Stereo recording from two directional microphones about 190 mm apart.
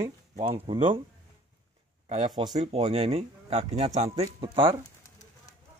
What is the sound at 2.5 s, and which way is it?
Speech, 35° right (ahead or behind).